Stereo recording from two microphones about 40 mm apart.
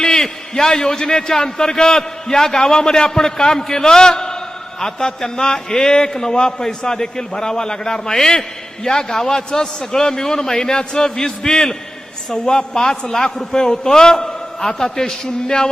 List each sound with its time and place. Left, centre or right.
0.0 s a man's voice: centre